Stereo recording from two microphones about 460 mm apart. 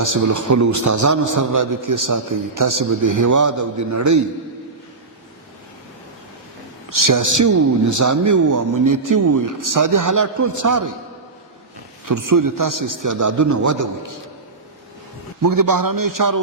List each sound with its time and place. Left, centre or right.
0.0 s a man's voice: right
6.9 s a man's voice: right
12.0 s a man's voice: right
15.4 s a man's voice: right